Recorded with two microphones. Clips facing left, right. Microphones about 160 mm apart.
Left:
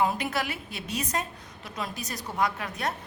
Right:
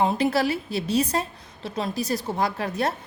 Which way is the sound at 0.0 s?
30° right (ahead or behind).